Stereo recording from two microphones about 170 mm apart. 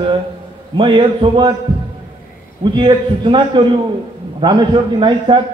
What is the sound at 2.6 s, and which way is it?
A man's voice, 25° right (ahead or behind).